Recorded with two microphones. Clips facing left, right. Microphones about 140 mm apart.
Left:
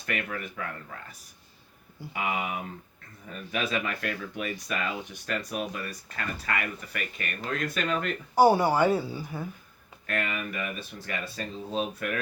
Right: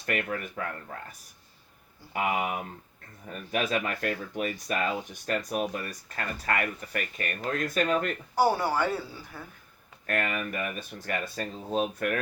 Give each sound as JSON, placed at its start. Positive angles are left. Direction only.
{"t": 0.0, "sound": "speech", "side_deg": -40}
{"t": 2.1, "sound": "speech", "side_deg": -40}
{"t": 8.4, "sound": "speech", "side_deg": 15}
{"t": 10.1, "sound": "speech", "side_deg": -45}